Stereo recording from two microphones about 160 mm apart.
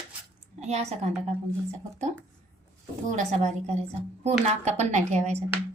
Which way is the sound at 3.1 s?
50° right (ahead or behind).